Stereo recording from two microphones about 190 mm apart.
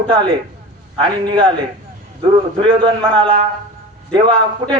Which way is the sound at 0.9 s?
25° right (ahead or behind).